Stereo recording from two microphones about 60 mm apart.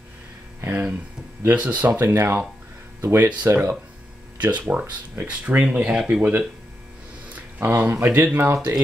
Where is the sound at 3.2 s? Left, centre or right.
Right.